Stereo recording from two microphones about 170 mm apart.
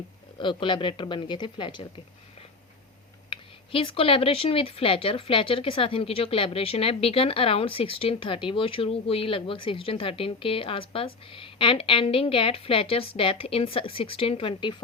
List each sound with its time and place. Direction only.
0.3 s speech: 30° left (ahead or behind)
3.2 s speech: 30° left (ahead or behind)